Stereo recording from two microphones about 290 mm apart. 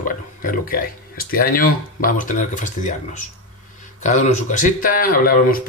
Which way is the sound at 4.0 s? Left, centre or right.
Left.